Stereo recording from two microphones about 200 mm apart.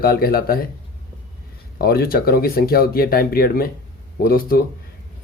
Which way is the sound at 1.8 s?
50° left (ahead or behind).